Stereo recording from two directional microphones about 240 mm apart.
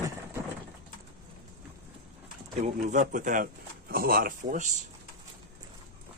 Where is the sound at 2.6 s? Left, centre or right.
Right.